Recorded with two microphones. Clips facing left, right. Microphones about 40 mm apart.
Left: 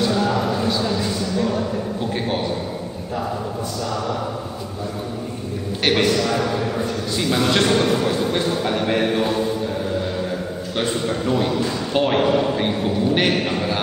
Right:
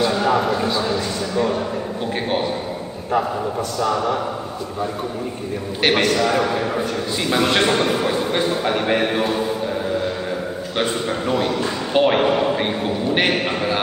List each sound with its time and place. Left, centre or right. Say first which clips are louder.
0.0 s a sound: right 2 dB; centre
3.9 s a man's voice: right 3 dB; centre
5.9 s a man's voice: right 1 dB; centre